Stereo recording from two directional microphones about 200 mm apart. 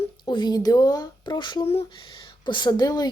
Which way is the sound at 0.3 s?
20° left (ahead or behind).